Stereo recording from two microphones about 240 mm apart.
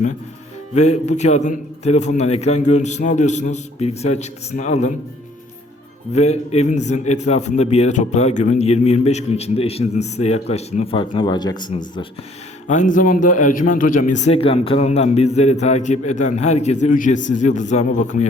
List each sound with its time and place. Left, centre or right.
0.7 s a man's voice: left
6.1 s a man's voice: left
12.6 s a man's voice: left